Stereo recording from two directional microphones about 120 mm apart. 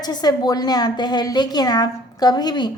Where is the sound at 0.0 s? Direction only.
35° left (ahead or behind).